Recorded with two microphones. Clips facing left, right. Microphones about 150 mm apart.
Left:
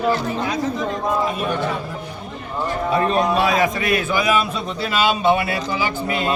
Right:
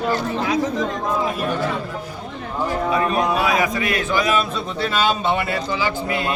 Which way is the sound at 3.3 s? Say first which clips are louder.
Left 2 dB; 30° left (ahead or behind).